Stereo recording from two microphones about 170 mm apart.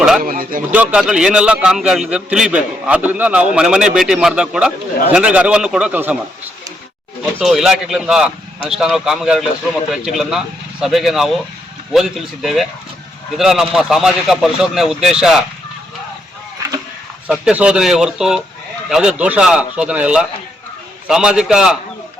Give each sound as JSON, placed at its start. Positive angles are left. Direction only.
{"t": 0.2, "sound": "speech", "side_deg": -55}
{"t": 0.7, "sound": "a man's voice", "side_deg": -10}
{"t": 7.3, "sound": "a man's voice", "side_deg": 0}
{"t": 17.2, "sound": "a man's voice", "side_deg": -5}